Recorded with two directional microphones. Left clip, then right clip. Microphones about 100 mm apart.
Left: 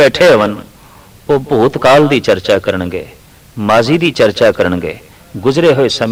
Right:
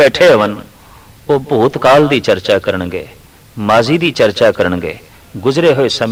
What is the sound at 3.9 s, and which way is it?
A man's voice, 35° left (ahead or behind).